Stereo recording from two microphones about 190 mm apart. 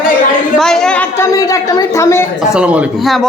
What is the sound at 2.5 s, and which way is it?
Speech, 5° right (ahead or behind).